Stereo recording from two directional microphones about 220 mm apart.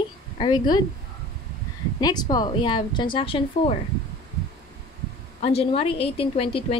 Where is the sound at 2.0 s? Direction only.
20° left (ahead or behind).